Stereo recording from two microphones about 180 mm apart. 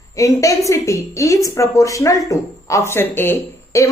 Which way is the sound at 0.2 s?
15° left (ahead or behind).